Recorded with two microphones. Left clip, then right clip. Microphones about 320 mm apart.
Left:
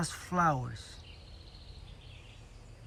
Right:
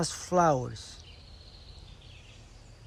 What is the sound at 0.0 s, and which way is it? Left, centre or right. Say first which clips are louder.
Speech: right 5 dB; centre.